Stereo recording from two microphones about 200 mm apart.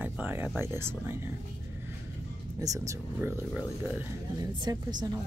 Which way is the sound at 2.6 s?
15° right (ahead or behind).